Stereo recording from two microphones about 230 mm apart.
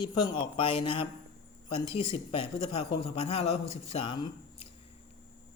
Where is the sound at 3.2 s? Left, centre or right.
Left.